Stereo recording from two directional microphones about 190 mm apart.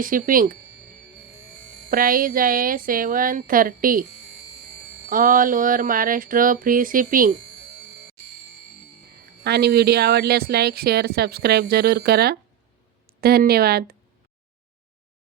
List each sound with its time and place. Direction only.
0.0 s speech: 45° right (ahead or behind)
1.9 s speech: 50° right (ahead or behind)
5.0 s speech: 45° right (ahead or behind)
9.4 s speech: 55° right (ahead or behind)